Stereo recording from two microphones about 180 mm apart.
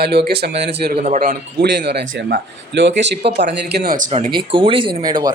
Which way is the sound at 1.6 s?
65° right (ahead or behind).